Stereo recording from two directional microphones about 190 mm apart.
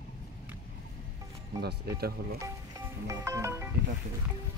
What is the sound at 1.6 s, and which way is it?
Speech, 55° right (ahead or behind).